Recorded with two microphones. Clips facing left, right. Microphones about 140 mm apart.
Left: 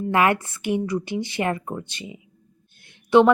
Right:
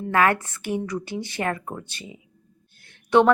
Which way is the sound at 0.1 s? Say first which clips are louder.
Even; 15° left (ahead or behind).